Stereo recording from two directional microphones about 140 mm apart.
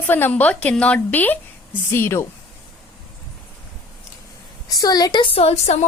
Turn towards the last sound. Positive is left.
turn(degrees=50)  # may be behind; listen again after turning